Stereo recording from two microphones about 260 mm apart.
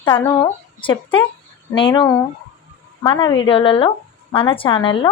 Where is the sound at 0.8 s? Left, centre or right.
Centre.